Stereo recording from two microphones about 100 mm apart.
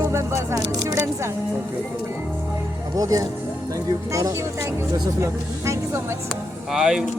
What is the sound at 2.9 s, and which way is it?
Speech, 35° right (ahead or behind).